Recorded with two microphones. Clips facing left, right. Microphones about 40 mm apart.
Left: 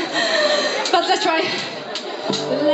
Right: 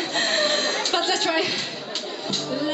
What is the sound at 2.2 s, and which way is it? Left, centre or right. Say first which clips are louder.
Speech: left 8 dB; centre.